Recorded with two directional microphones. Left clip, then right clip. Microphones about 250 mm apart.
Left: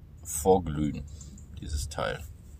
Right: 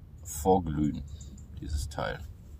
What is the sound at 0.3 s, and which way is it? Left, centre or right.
Speech, centre.